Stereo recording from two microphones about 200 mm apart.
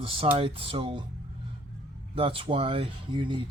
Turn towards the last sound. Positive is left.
turn(degrees=-25)  # may be behind; listen again after turning